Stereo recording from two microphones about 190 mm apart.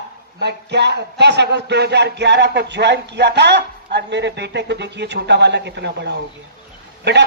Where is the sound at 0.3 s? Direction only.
60° right (ahead or behind).